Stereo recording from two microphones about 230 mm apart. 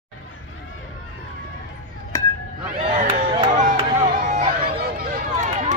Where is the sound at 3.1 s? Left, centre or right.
Right.